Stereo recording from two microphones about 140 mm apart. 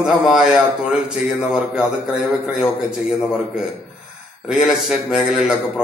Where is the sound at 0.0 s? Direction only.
5° right (ahead or behind).